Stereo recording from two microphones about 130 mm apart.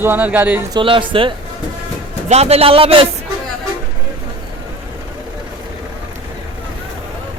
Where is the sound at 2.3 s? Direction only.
55° right (ahead or behind).